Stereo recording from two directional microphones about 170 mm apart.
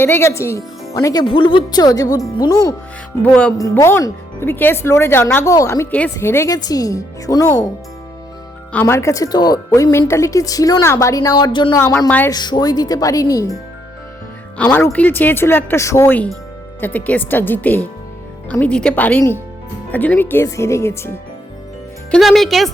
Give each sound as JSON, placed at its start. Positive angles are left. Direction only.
{"t": 0.0, "sound": "speech", "side_deg": 15}
{"t": 3.2, "sound": "speech", "side_deg": 5}
{"t": 3.6, "sound": "speech", "side_deg": 20}
{"t": 8.7, "sound": "speech", "side_deg": 10}
{"t": 11.9, "sound": "speech", "side_deg": 10}
{"t": 12.3, "sound": "speech", "side_deg": 25}
{"t": 14.6, "sound": "speech", "side_deg": 10}
{"t": 22.1, "sound": "speech", "side_deg": 0}